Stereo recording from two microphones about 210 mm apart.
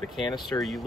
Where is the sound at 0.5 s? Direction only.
Centre (ahead or behind).